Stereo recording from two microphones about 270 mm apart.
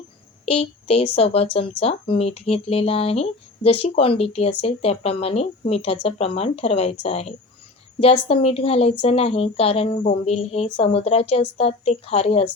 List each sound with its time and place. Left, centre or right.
0.4 s a woman's voice: left